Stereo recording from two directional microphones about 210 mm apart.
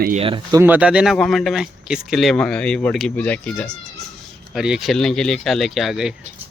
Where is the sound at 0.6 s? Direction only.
5° right (ahead or behind).